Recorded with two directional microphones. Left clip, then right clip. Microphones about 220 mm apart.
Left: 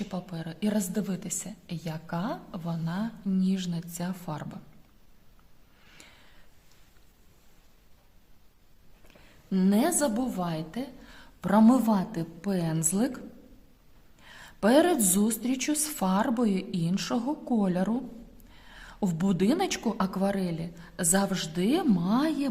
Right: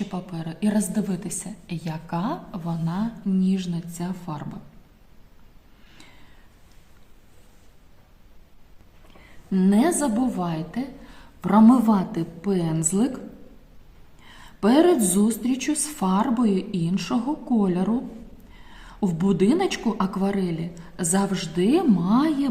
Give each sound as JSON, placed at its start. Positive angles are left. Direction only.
{"t": 0.1, "sound": "a woman's voice", "side_deg": 40}
{"t": 9.5, "sound": "a woman's voice", "side_deg": 40}